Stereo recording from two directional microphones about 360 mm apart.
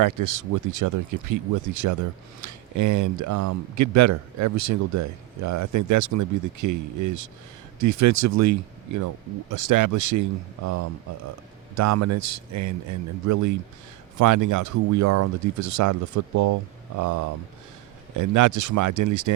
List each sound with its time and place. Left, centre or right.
0.0 s speech: right
9.5 s speech: right
11.7 s speech: right